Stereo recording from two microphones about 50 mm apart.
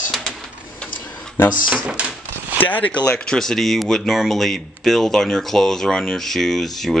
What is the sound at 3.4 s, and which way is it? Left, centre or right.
Speech, centre.